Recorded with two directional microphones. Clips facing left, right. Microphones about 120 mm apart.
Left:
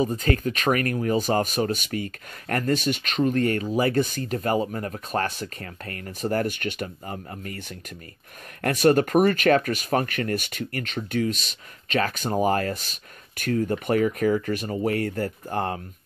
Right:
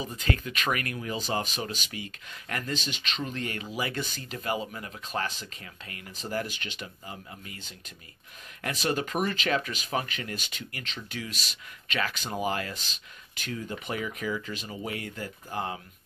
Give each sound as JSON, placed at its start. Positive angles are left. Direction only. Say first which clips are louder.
{"t": 0.0, "sound": "speech", "louder": "left 8 dB", "side_deg": 40}